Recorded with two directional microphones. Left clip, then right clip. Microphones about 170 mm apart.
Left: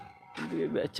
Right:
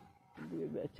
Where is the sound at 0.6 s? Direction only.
35° left (ahead or behind).